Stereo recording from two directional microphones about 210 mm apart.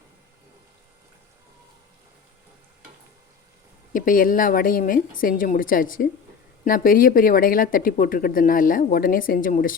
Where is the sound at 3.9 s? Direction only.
40° left (ahead or behind).